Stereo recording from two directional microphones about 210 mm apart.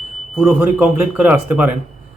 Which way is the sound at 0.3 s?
10° right (ahead or behind).